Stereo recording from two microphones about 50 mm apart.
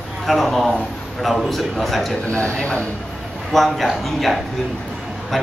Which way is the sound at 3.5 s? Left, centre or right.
Centre.